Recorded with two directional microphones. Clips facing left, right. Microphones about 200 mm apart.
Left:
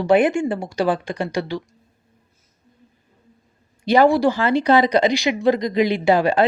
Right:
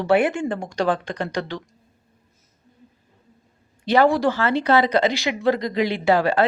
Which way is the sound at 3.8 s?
15° left (ahead or behind).